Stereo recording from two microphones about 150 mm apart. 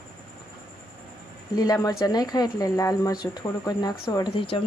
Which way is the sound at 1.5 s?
25° left (ahead or behind).